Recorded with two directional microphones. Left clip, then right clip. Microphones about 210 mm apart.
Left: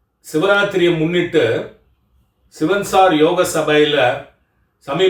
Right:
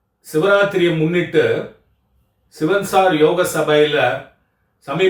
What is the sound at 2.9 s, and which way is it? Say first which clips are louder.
Speech: left 2 dB; 15° left (ahead or behind).